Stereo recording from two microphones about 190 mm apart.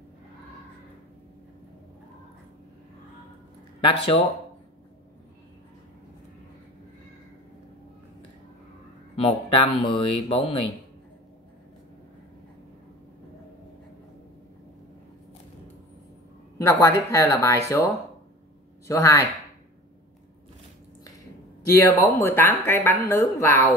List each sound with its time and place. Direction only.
3.8 s speech: 30° left (ahead or behind)
9.1 s speech: 30° left (ahead or behind)
16.5 s speech: 15° left (ahead or behind)
21.7 s speech: 15° left (ahead or behind)